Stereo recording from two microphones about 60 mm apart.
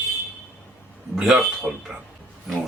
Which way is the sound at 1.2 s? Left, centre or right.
Centre.